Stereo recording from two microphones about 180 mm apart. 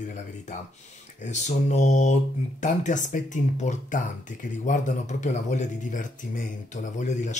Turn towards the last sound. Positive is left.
turn(degrees=40)  # may be behind; listen again after turning